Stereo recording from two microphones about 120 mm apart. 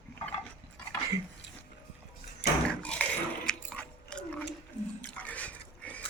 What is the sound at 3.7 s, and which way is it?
Dog, 10° left (ahead or behind).